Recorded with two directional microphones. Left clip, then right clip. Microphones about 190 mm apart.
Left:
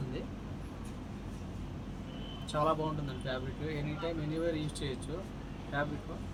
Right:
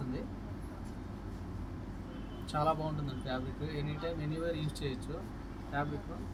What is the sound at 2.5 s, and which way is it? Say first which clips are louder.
Speech: left 1 dB; 15° left (ahead or behind).